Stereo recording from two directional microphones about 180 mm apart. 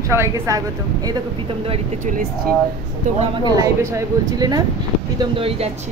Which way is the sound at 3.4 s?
20° right (ahead or behind).